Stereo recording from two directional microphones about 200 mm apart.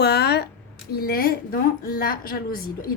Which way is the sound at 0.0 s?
55° left (ahead or behind).